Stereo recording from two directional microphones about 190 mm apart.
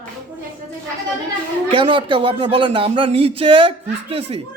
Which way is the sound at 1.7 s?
25° right (ahead or behind).